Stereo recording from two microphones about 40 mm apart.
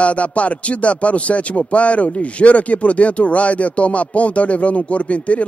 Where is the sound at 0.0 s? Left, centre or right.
Left.